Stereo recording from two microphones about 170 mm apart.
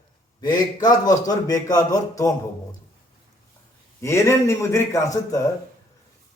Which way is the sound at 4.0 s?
15° left (ahead or behind).